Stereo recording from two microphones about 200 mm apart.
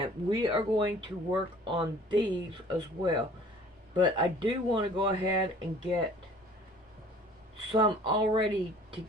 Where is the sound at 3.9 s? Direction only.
25° right (ahead or behind).